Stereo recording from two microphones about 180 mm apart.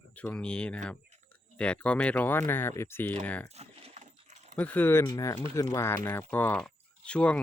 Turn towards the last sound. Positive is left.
turn(degrees=5)  # may be behind; listen again after turning